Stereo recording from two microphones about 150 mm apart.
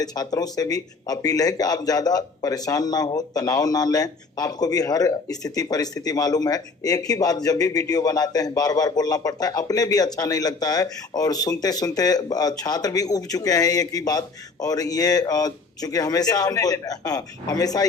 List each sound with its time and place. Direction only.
0.0 s speech: 25° left (ahead or behind)